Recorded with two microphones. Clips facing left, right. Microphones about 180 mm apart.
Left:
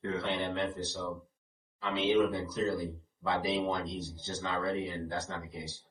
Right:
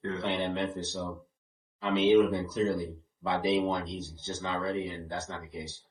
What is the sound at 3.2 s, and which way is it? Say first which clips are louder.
Speech: right 4 dB; 20° right (ahead or behind).